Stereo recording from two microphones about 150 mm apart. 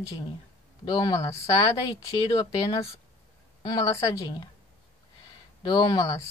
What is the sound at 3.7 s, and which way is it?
Speech, 25° left (ahead or behind).